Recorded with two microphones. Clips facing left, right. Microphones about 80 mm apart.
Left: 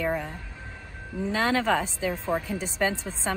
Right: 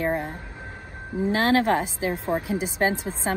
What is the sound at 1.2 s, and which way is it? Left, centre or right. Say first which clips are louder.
A woman's voice: right 4 dB; right.